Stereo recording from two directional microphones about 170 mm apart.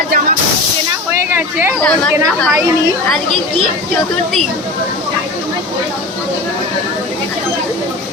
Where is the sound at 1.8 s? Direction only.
5° left (ahead or behind).